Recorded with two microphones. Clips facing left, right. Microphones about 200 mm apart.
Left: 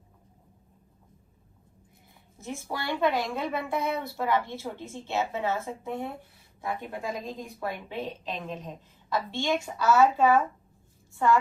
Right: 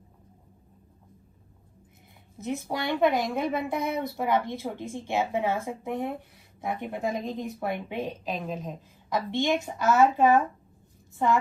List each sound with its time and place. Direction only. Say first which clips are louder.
2.4 s a woman's voice: right 5 dB; 20° right (ahead or behind)